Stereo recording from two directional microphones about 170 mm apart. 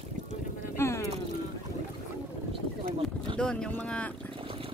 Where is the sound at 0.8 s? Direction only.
15° left (ahead or behind).